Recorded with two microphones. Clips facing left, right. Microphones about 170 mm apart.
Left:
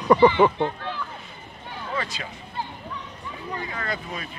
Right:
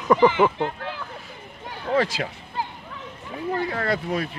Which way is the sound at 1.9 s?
90° right.